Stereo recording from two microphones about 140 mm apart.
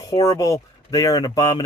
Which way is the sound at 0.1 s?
25° left (ahead or behind).